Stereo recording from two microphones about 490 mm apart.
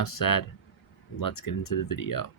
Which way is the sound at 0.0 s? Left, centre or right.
Left.